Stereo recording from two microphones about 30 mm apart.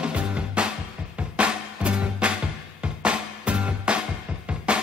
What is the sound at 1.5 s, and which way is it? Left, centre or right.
Music, right.